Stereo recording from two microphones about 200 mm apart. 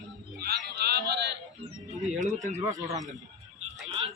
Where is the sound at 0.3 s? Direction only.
50° right (ahead or behind).